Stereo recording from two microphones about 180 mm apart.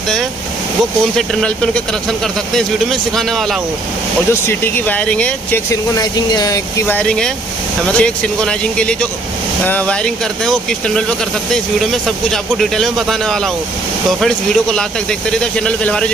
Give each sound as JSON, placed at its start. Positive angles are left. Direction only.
{"t": 1.1, "sound": "speech", "side_deg": 5}
{"t": 4.3, "sound": "speech", "side_deg": 10}
{"t": 5.9, "sound": "speech", "side_deg": 20}
{"t": 7.0, "sound": "speech", "side_deg": 5}